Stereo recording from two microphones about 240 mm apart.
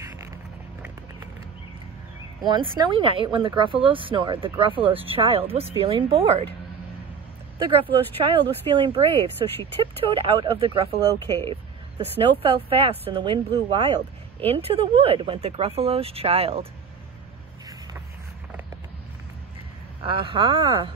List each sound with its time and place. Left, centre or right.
2.4 s speech: centre
7.5 s speech: centre
20.0 s speech: right